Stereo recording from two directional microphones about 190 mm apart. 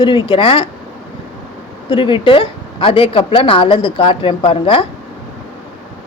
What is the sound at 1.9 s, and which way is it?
A woman's voice, 25° left (ahead or behind).